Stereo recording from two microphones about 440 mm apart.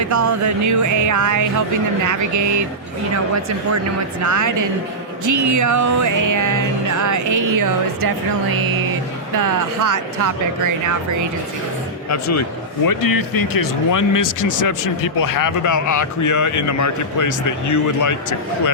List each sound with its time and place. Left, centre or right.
0.1 s music: right
4.2 s music: right
9.3 s speech: right
12.0 s speech: left